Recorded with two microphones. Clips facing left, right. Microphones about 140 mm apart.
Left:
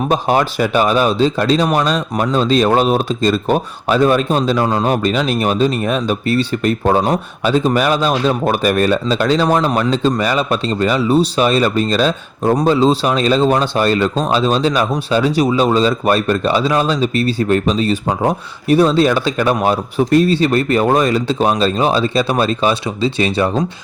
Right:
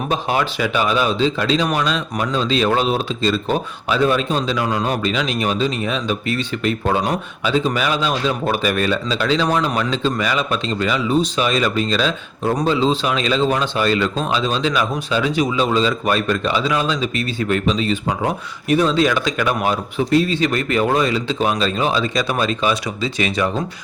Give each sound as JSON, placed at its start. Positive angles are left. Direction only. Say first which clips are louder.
{"t": 0.1, "sound": "speech", "louder": "left 4 dB", "side_deg": 40}
{"t": 20.3, "sound": "speech", "louder": "left 5 dB", "side_deg": 35}